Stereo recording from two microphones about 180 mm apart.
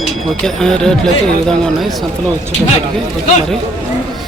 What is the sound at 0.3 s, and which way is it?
Speech, centre (ahead or behind).